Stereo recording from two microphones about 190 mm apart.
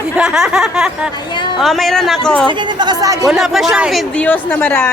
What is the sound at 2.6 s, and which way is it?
Speech, 20° right (ahead or behind).